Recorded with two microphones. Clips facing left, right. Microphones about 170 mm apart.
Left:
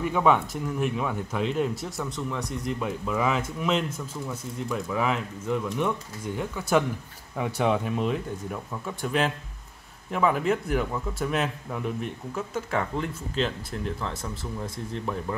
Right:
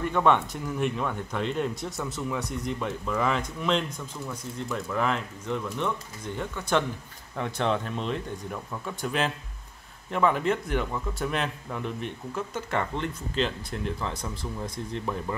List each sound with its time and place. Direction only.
0.0 s speech: 5° left (ahead or behind)